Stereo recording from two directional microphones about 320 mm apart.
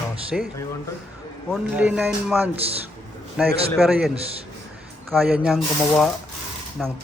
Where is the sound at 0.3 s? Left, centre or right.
Centre.